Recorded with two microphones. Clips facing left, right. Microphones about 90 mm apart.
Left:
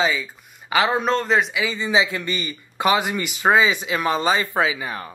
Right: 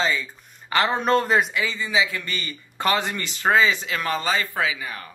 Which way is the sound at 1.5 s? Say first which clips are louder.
Left 3 dB; 20° left (ahead or behind).